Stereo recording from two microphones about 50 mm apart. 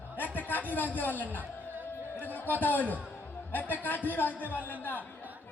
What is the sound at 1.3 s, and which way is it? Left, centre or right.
Music, right.